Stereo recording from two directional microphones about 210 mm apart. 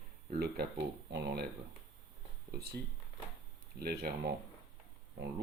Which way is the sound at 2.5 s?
50° right (ahead or behind).